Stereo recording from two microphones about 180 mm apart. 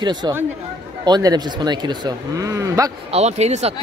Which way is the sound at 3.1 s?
35° right (ahead or behind).